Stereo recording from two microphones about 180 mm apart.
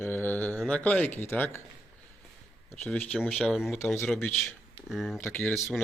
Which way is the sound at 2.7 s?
10° left (ahead or behind).